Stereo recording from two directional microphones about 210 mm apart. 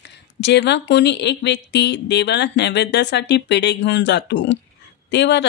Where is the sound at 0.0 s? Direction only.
55° left (ahead or behind).